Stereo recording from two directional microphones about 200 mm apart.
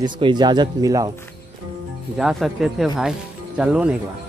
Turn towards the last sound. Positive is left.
turn(degrees=-5)  # may be behind; listen again after turning